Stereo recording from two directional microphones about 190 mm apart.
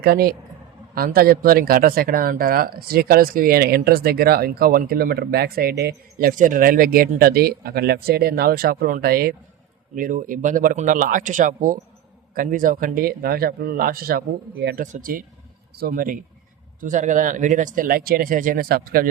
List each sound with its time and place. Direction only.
0.0 s speech: 55° right (ahead or behind)